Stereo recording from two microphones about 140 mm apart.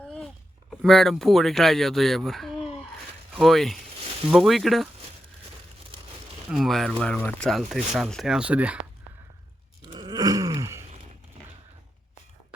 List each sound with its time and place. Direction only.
0.7 s speech: centre (ahead or behind)
6.5 s speech: centre (ahead or behind)
9.8 s groan: 30° right (ahead or behind)